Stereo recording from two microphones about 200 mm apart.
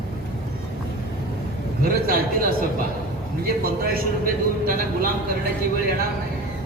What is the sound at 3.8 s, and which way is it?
A man's voice, 45° right (ahead or behind).